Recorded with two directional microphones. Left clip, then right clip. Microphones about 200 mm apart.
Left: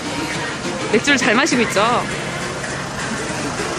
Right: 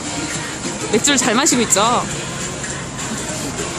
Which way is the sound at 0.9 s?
25° right (ahead or behind).